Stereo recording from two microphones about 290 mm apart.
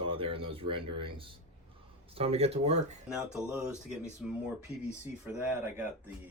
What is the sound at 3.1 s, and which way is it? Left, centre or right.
Speech, centre.